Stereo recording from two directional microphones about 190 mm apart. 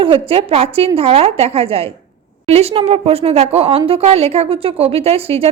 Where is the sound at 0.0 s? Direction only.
30° right (ahead or behind).